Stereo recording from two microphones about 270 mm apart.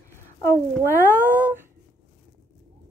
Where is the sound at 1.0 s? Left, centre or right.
Centre.